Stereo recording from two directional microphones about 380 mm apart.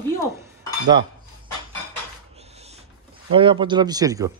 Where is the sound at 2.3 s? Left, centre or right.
Centre.